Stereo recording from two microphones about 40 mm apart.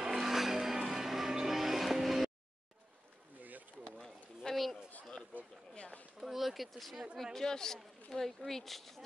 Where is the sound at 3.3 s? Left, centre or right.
Right.